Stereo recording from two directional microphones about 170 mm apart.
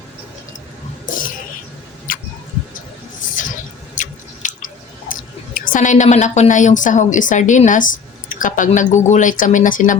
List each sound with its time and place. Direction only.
1.0 s a sound: 55° left (ahead or behind)
2.1 s tick-tock: 55° left (ahead or behind)
3.3 s drip: 50° left (ahead or behind)
5.5 s a woman's voice: 50° left (ahead or behind)